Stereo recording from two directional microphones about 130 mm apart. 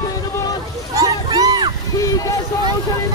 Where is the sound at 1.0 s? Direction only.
30° right (ahead or behind).